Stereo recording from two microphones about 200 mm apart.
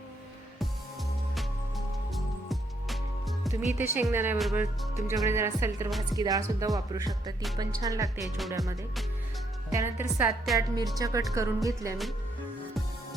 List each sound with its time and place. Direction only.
2.1 s music: centre (ahead or behind)
3.8 s a woman's voice: 10° right (ahead or behind)
4.4 s music: centre (ahead or behind)
5.0 s a woman's voice: 15° right (ahead or behind)
8.2 s music: centre (ahead or behind)
9.6 s a woman's voice: 15° right (ahead or behind)
10.9 s a woman's voice: 15° right (ahead or behind)